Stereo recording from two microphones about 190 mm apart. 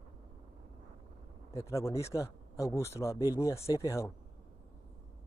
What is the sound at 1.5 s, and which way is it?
Speech, 15° left (ahead or behind).